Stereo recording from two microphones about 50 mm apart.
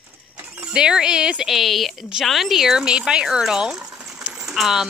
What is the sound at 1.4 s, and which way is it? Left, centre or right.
Speech, centre.